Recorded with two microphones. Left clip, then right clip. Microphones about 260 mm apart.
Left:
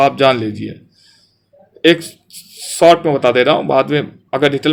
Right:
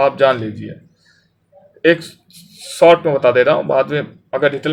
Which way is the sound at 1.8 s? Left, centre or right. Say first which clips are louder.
Left 2 dB; left.